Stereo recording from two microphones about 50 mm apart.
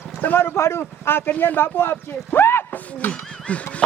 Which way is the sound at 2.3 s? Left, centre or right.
Left.